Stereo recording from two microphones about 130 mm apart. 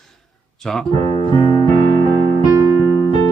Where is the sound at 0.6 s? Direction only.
5° left (ahead or behind).